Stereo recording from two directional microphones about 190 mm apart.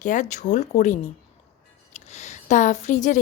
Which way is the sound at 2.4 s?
40° left (ahead or behind).